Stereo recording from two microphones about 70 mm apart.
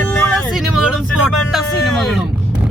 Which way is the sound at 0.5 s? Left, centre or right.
Centre.